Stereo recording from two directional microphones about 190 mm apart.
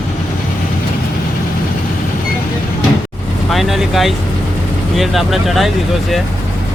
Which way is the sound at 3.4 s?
Centre (ahead or behind).